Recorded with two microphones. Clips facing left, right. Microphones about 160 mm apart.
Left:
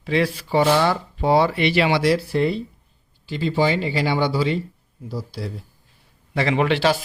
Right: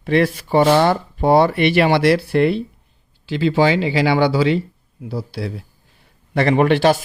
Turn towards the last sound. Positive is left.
turn(degrees=-50)  # may be behind; listen again after turning